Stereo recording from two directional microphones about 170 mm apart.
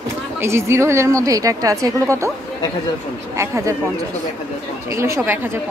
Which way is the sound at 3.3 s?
15° right (ahead or behind).